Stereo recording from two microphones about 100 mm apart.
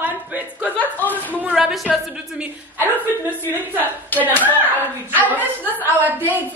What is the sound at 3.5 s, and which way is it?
Speech, 20° left (ahead or behind).